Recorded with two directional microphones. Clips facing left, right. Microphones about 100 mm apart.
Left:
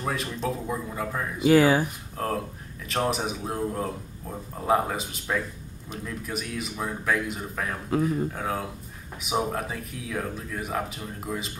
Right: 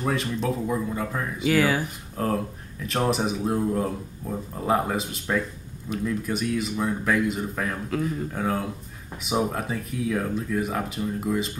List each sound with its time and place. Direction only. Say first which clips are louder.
0.0 s speech: right 3 dB; centre (ahead or behind)
1.5 s speech: left 4 dB; 25° left (ahead or behind)
2.1 s speech: right 3 dB; centre (ahead or behind)